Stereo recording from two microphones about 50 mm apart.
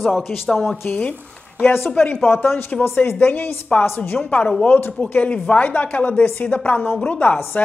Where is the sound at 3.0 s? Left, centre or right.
Left.